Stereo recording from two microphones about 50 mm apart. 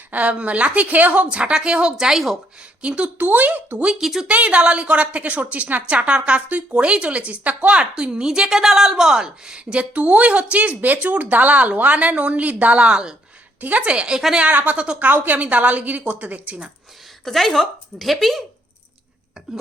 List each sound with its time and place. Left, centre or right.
0.1 s a woman's voice: right; by 2.4 s centre
2.8 s a woman's voice: right
4.0 s speech: centre
4.3 s a woman's voice: right
13.6 s a woman's voice: right
14.5 s a woman's voice: right
17.2 s speech: centre